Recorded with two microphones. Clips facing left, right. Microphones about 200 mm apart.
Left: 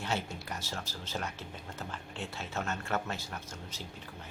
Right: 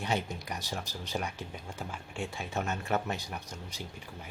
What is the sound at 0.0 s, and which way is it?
Speech, 15° right (ahead or behind).